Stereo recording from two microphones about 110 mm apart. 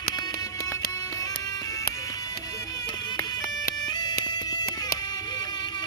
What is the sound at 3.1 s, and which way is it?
Music, 40° left (ahead or behind).